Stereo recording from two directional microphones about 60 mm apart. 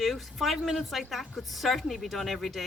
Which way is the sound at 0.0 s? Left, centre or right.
Centre.